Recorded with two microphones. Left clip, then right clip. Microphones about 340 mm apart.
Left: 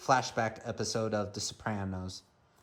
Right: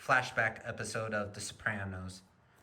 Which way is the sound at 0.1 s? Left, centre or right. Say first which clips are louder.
Left 1 dB; centre.